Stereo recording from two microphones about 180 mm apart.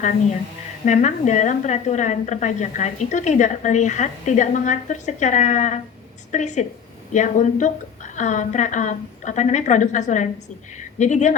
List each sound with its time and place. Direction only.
0.9 s a woman's voice: 40° left (ahead or behind)